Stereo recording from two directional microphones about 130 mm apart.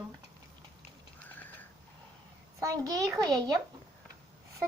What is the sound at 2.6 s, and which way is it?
Speech, 25° right (ahead or behind).